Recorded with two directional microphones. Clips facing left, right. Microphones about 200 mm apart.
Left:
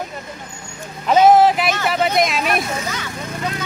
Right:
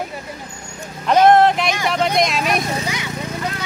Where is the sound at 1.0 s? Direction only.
5° left (ahead or behind).